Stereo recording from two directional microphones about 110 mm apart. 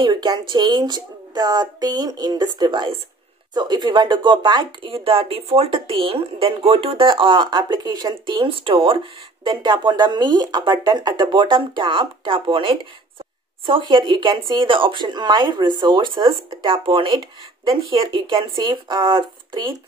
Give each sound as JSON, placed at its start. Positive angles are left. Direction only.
{"t": 0.0, "sound": "a woman's voice", "side_deg": -45}
{"t": 4.9, "sound": "speech", "side_deg": -55}
{"t": 9.4, "sound": "speech", "side_deg": -40}